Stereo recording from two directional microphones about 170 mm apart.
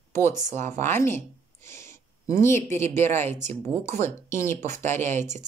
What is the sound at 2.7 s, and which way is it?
Speech, 15° left (ahead or behind).